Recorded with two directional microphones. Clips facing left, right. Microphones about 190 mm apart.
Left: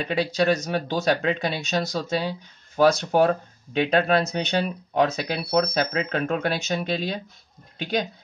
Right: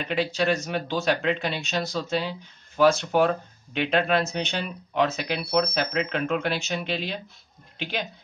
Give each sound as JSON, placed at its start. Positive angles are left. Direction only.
{"t": 0.0, "sound": "speech", "side_deg": 40}